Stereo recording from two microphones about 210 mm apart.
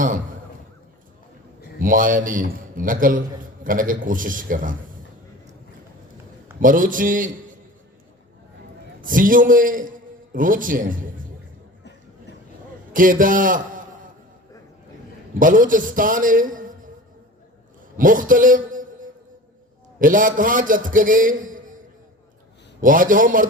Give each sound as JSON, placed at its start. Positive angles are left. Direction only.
{"t": 1.8, "sound": "a man's voice", "side_deg": -40}
{"t": 6.6, "sound": "a man's voice", "side_deg": -40}
{"t": 9.0, "sound": "a man's voice", "side_deg": -40}
{"t": 12.9, "sound": "a man's voice", "side_deg": -40}
{"t": 15.4, "sound": "a man's voice", "side_deg": -40}
{"t": 17.9, "sound": "a man's voice", "side_deg": -40}
{"t": 20.0, "sound": "a man's voice", "side_deg": -40}
{"t": 22.8, "sound": "a man's voice", "side_deg": -40}